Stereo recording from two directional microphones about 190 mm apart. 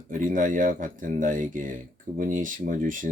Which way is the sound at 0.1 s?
45° right (ahead or behind).